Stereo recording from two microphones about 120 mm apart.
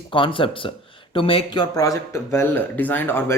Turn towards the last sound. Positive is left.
turn(degrees=15)  # may be behind; listen again after turning